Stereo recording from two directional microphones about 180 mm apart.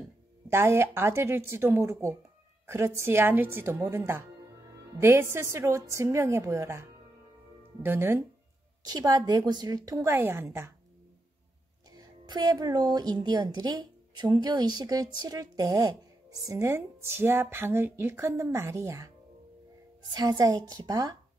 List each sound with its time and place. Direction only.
0.5 s a woman's voice: 15° right (ahead or behind)
11.9 s a woman's voice: 20° right (ahead or behind)